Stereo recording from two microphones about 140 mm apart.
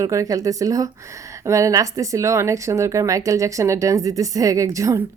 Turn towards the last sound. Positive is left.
turn(degrees=-25)  # may be behind; listen again after turning